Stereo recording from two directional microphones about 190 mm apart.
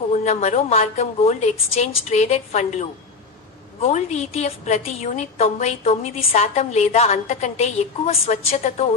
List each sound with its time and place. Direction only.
0.1 s a woman's voice: 35° left (ahead or behind)